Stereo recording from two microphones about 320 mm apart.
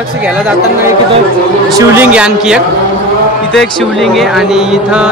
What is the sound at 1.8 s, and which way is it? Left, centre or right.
Speech, centre.